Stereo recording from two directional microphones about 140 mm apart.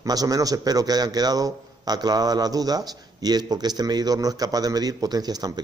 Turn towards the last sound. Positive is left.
turn(degrees=-30)  # may be behind; listen again after turning